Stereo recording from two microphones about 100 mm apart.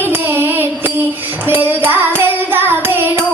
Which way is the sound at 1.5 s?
20° right (ahead or behind).